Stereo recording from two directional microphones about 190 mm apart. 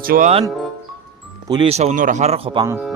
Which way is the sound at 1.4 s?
25° right (ahead or behind).